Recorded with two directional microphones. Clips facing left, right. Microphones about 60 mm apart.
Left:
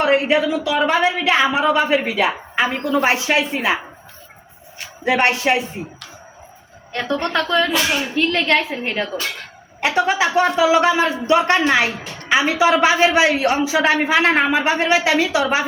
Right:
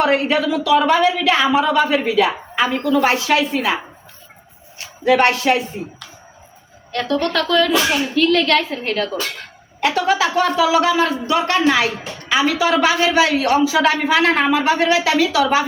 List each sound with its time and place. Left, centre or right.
0.0 s a woman's voice: centre
5.2 s a woman's voice: left
6.9 s a woman's voice: left